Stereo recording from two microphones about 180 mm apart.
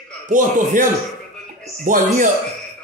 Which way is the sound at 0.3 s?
45° right (ahead or behind).